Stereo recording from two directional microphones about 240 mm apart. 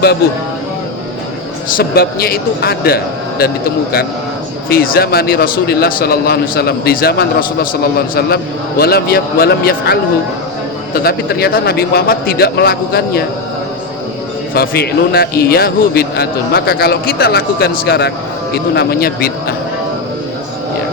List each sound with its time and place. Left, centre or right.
1.7 s speech: left
4.7 s speech: left
14.5 s speech: left